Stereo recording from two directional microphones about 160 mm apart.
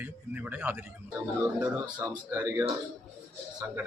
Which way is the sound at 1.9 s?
25° right (ahead or behind).